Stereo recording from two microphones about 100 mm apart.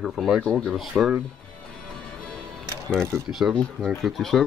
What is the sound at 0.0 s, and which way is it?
Speech, 5° right (ahead or behind).